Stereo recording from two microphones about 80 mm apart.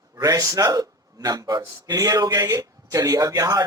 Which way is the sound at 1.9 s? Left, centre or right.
Right.